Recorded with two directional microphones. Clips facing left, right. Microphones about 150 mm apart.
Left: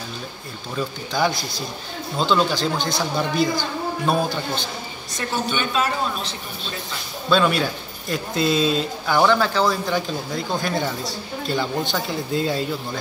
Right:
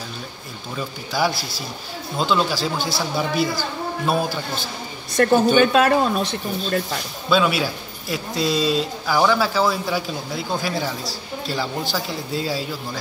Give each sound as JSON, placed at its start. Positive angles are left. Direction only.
{"t": 0.7, "sound": "a man's voice", "side_deg": -5}
{"t": 5.1, "sound": "speech", "side_deg": -60}
{"t": 7.2, "sound": "a man's voice", "side_deg": -5}